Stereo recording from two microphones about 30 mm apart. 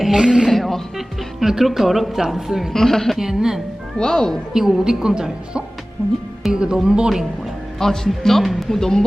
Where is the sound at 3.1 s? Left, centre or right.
Centre.